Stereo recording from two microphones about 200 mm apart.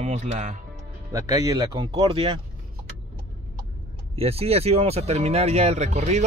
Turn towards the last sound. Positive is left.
turn(degrees=-35)  # may be behind; listen again after turning